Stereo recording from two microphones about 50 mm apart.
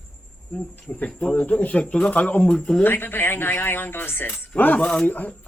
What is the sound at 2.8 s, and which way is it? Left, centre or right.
Speech, left.